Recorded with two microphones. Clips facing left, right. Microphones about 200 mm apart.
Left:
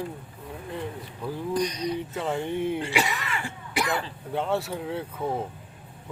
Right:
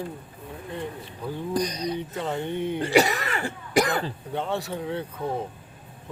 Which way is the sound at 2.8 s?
40° right (ahead or behind).